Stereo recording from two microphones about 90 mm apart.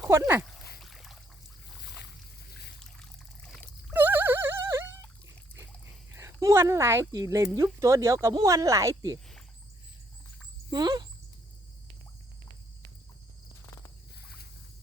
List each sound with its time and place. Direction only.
0.8 s boat: centre (ahead or behind)
3.0 s pour: 5° left (ahead or behind)
3.9 s a sound: 20° right (ahead or behind)
6.1 s speech: 35° right (ahead or behind)
10.7 s speech: 50° right (ahead or behind)